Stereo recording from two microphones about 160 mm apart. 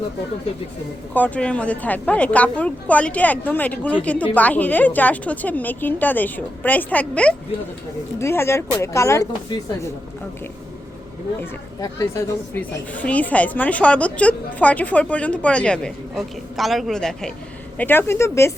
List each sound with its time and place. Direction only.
1.1 s a woman's voice: 10° left (ahead or behind)
11.8 s a woman's voice: 20° left (ahead or behind)